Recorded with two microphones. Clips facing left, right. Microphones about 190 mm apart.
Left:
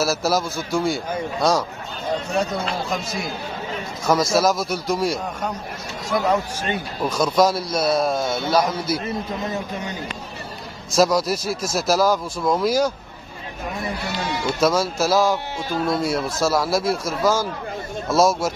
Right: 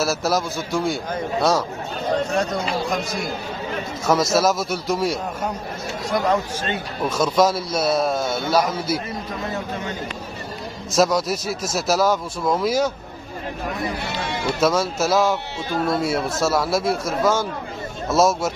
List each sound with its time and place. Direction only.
0.0 s speech: centre (ahead or behind)
2.6 s speech: centre (ahead or behind)
7.1 s speech: 5° right (ahead or behind)
9.0 s speech: 15° left (ahead or behind)
10.9 s speech: centre (ahead or behind)
14.6 s speech: centre (ahead or behind)